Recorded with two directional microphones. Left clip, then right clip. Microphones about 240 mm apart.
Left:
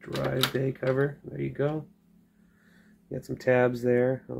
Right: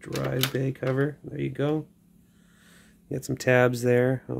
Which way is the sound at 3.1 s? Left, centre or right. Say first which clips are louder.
Right 2 dB; right.